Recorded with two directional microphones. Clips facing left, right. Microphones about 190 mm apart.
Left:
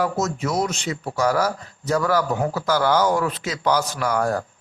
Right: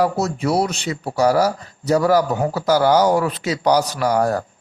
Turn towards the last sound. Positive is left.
turn(degrees=-40)  # may be behind; listen again after turning